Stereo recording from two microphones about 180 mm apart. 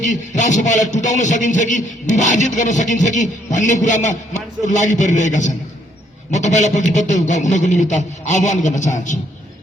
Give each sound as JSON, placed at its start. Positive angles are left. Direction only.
{"t": 0.0, "sound": "a man's voice", "side_deg": 45}